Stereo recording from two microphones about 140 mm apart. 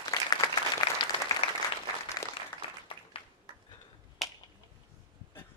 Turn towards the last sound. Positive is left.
turn(degrees=0)  # may be behind; listen again after turning